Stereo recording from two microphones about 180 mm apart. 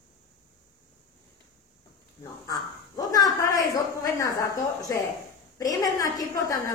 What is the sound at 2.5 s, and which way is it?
Speech, 20° left (ahead or behind).